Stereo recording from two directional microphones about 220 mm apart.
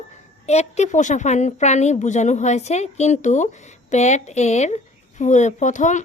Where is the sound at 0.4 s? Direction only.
30° left (ahead or behind).